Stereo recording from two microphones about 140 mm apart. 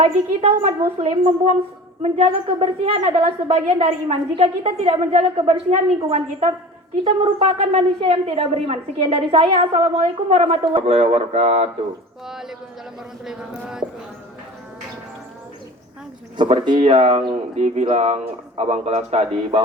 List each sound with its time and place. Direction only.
0.0 s a woman's voice: 45° right (ahead or behind)
12.3 s speech: 5° right (ahead or behind)
16.4 s a woman's voice: 35° right (ahead or behind)